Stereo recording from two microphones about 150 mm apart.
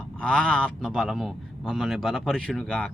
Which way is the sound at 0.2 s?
5° left (ahead or behind).